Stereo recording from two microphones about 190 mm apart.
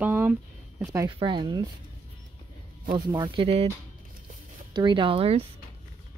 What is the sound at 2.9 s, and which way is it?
Speech, 25° right (ahead or behind).